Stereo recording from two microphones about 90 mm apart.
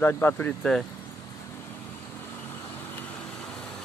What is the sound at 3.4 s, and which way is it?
Vehicle, 10° left (ahead or behind).